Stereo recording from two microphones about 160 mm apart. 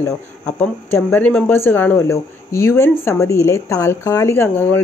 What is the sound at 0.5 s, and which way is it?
Speech, 10° left (ahead or behind).